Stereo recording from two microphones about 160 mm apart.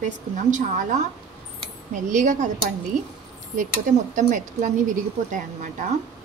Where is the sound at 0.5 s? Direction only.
50° right (ahead or behind).